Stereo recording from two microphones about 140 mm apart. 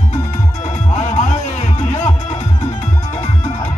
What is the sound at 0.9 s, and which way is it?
Music, 55° left (ahead or behind).